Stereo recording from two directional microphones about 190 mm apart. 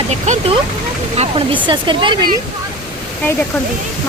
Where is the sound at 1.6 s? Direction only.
25° right (ahead or behind).